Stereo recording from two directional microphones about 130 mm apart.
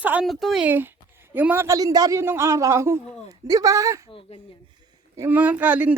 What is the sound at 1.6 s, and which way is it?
A man's voice, 25° right (ahead or behind).